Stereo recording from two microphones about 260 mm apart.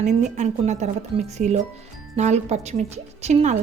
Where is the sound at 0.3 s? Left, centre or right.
Right.